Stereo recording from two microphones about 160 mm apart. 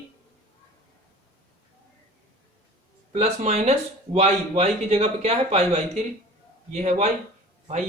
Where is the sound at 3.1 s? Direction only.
40° right (ahead or behind).